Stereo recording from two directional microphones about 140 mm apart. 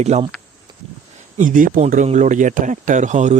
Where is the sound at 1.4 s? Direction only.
70° right (ahead or behind).